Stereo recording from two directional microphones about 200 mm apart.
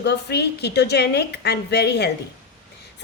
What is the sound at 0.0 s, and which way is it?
A woman's voice, 55° left (ahead or behind).